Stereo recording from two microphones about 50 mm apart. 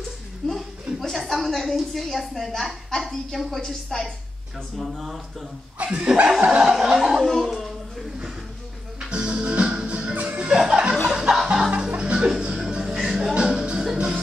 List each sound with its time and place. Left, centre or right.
0.4 s a woman's voice: centre
5.9 s chuckle: right
6.7 s a woman's voice: centre
9.1 s music: centre